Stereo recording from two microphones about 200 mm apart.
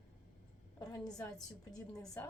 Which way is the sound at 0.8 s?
20° left (ahead or behind).